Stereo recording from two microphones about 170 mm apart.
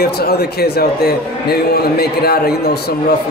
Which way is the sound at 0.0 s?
70° left (ahead or behind).